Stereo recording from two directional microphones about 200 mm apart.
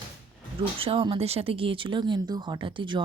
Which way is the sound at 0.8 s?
25° right (ahead or behind).